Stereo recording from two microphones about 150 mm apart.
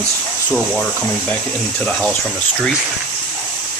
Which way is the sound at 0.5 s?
5° left (ahead or behind).